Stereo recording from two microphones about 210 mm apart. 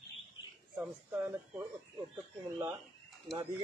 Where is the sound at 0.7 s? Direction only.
5° right (ahead or behind).